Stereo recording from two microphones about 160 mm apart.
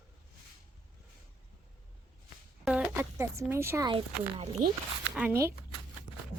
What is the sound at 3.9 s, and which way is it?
Speech, 35° right (ahead or behind).